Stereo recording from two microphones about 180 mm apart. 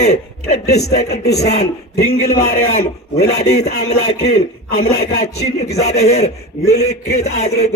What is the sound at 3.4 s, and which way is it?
Speech, 40° left (ahead or behind).